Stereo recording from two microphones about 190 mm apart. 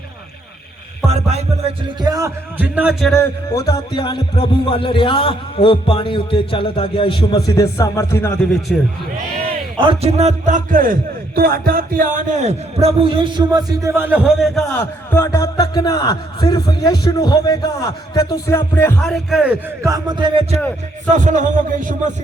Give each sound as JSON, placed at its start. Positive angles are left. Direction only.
{"t": 1.0, "sound": "a man's voice", "side_deg": -35}
{"t": 2.0, "sound": "a man's voice", "side_deg": -20}
{"t": 3.5, "sound": "a man's voice", "side_deg": 20}
{"t": 7.5, "sound": "speech", "side_deg": 15}
{"t": 8.7, "sound": "speech", "side_deg": 0}
{"t": 9.4, "sound": "a man's voice", "side_deg": -25}
{"t": 15.2, "sound": "a man's voice", "side_deg": 20}
{"t": 19.0, "sound": "speech", "side_deg": 0}
{"t": 19.8, "sound": "a man's voice", "side_deg": -20}
{"t": 21.1, "sound": "a man's voice", "side_deg": -40}